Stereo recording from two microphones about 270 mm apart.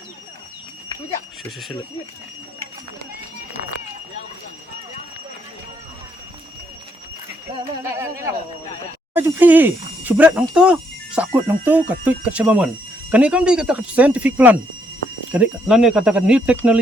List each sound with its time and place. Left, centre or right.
7.5 s speech: centre